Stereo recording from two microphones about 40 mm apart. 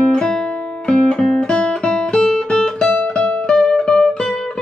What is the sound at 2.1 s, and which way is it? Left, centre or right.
Guitar, centre.